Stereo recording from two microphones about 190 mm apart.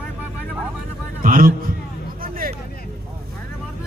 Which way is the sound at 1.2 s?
45° right (ahead or behind).